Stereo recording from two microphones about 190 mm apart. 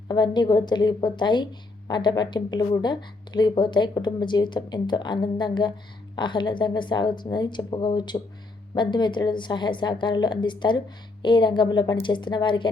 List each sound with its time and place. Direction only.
0.1 s a woman's voice: 20° left (ahead or behind)